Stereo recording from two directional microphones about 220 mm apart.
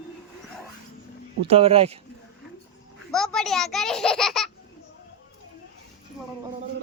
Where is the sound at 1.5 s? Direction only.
25° right (ahead or behind).